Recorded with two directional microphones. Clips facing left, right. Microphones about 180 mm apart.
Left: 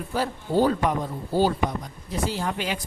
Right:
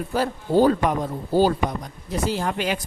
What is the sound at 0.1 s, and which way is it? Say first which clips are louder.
Speech: right 4 dB; 45° right (ahead or behind).